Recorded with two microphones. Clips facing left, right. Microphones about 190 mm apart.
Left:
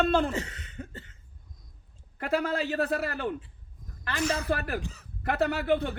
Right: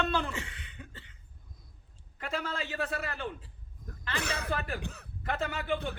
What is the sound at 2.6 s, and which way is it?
Speech, 40° left (ahead or behind).